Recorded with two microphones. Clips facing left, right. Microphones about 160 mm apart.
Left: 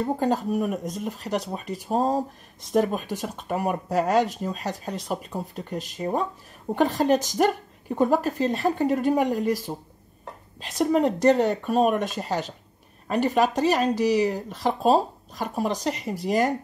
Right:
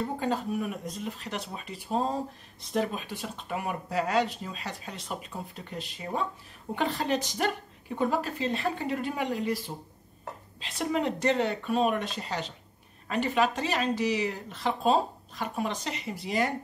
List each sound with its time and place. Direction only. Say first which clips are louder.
0.0 s speech: left 6 dB; 40° left (ahead or behind)